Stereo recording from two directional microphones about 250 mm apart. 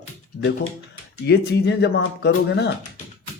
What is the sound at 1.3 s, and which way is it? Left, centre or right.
Speech, left.